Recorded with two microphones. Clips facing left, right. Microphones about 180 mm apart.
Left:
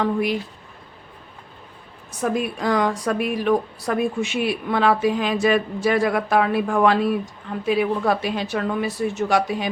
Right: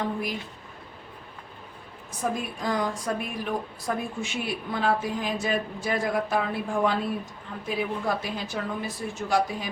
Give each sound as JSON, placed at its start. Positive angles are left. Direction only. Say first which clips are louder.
{"t": 0.0, "sound": "speech", "louder": "left 8 dB", "side_deg": 75}
{"t": 2.3, "sound": "speech", "louder": "left 9 dB", "side_deg": 75}